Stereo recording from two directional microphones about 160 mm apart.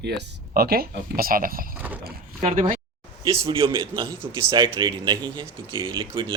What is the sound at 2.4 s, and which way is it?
Speech, 50° right (ahead or behind).